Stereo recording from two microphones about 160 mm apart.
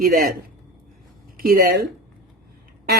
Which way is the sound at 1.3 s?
70° right (ahead or behind).